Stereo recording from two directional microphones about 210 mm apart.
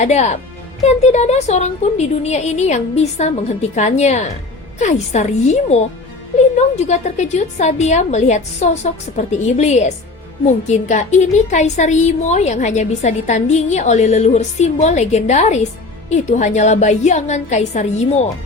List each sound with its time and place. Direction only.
0.0 s a woman's voice: 35° left (ahead or behind)